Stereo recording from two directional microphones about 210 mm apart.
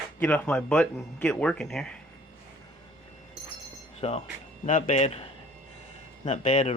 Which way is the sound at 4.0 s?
30° left (ahead or behind).